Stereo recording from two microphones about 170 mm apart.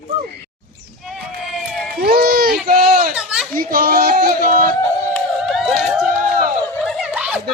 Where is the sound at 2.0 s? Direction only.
65° right (ahead or behind).